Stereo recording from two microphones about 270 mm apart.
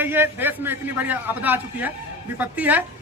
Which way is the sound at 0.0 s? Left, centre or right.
Centre.